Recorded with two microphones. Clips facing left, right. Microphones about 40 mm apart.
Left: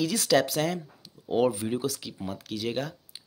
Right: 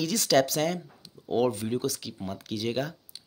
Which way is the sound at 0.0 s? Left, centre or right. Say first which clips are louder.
Even; centre.